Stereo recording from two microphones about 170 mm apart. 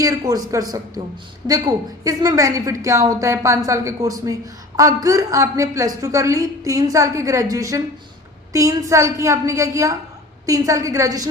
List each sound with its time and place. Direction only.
0.0 s a woman's voice: 20° right (ahead or behind)